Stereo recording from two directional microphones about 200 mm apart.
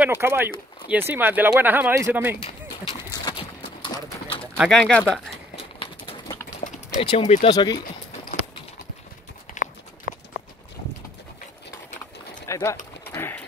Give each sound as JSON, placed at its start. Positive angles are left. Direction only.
{"t": 0.0, "sound": "speech", "side_deg": -10}
{"t": 3.1, "sound": "clip-clop", "side_deg": 20}
{"t": 4.6, "sound": "speech", "side_deg": 0}
{"t": 5.6, "sound": "bird", "side_deg": 30}
{"t": 6.9, "sound": "speech", "side_deg": 25}
{"t": 7.5, "sound": "speech", "side_deg": 20}
{"t": 9.5, "sound": "a sound", "side_deg": 45}
{"t": 12.4, "sound": "bird", "side_deg": 15}
{"t": 13.0, "sound": "a sound", "side_deg": 10}